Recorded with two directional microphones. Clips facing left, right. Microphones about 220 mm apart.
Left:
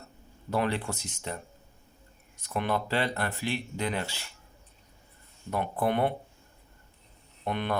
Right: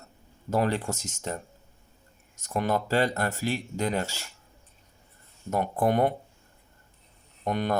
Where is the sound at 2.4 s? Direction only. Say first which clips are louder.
Right 3 dB; 40° right (ahead or behind).